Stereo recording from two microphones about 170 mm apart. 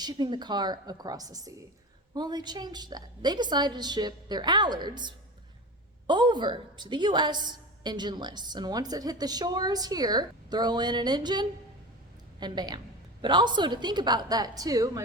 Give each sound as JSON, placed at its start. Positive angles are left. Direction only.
{"t": 0.0, "sound": "a woman's voice", "side_deg": -25}